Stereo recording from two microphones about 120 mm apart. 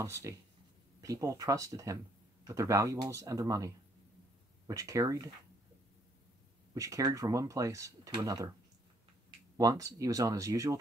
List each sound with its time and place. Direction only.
0.0 s speech: 25° right (ahead or behind)
6.7 s speech: 30° right (ahead or behind)
9.6 s speech: 30° right (ahead or behind)